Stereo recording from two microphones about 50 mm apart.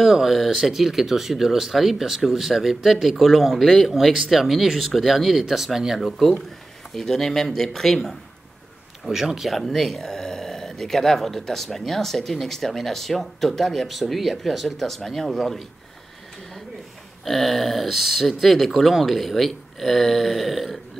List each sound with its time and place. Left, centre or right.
0.0 s speech: centre
7.0 s speech: centre
9.0 s speech: centre
17.2 s speech: centre